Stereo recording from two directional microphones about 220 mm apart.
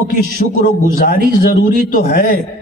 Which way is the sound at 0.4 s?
40° left (ahead or behind).